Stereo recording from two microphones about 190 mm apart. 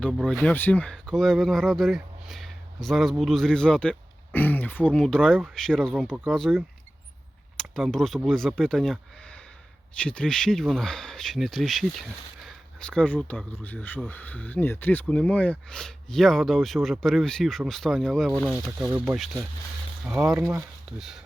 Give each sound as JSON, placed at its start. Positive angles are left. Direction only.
{"t": 0.3, "sound": "speech", "side_deg": 5}
{"t": 10.0, "sound": "speech", "side_deg": 5}